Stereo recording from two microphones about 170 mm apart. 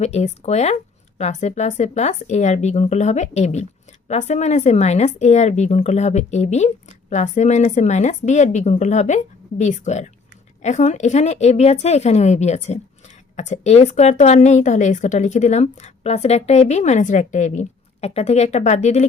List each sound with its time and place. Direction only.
0.0 s a woman's voice: 40° left (ahead or behind)